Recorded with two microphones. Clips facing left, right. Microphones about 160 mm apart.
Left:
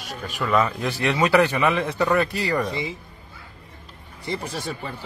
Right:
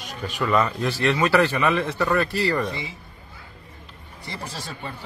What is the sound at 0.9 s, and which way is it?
A man's voice, 20° left (ahead or behind).